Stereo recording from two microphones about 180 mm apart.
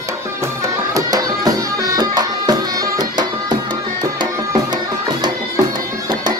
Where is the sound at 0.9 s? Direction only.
20° right (ahead or behind).